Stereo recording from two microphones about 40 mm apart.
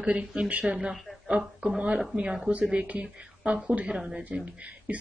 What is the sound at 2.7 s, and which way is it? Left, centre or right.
Speech, right.